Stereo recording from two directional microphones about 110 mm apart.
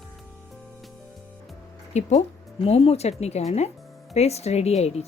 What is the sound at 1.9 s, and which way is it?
Speech, 90° left.